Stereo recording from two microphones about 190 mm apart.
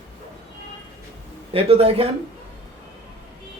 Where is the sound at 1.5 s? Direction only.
30° right (ahead or behind).